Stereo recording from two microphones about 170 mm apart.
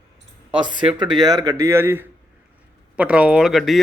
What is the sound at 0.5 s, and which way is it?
Speech, 30° right (ahead or behind).